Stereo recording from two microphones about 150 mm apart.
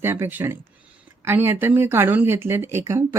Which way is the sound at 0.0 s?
15° right (ahead or behind).